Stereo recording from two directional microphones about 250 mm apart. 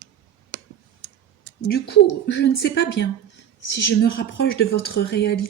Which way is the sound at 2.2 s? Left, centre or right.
Left.